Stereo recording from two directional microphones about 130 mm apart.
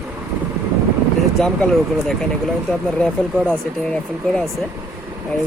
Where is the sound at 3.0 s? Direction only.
10° left (ahead or behind).